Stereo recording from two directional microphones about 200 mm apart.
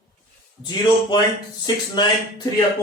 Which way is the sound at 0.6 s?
20° left (ahead or behind).